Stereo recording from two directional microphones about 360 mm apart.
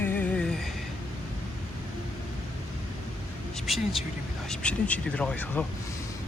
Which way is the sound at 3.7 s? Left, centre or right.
Centre.